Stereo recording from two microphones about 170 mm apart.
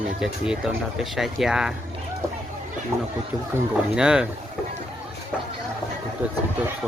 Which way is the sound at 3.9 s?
5° right (ahead or behind).